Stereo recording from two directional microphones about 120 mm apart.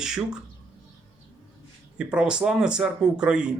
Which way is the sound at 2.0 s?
10° right (ahead or behind).